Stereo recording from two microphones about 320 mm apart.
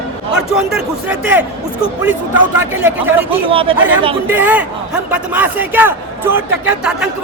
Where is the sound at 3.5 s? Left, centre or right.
Centre.